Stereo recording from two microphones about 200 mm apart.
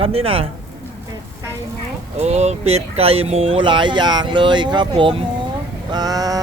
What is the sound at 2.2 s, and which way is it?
Speech, 35° right (ahead or behind).